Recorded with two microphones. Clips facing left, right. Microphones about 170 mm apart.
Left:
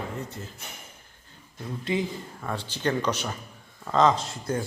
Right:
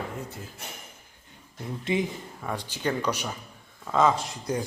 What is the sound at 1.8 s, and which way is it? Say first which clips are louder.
Speech: right 1 dB; 20° right (ahead or behind).